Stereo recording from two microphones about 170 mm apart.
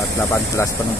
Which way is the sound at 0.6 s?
15° left (ahead or behind).